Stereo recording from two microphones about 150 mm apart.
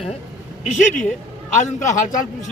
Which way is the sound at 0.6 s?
50° left (ahead or behind).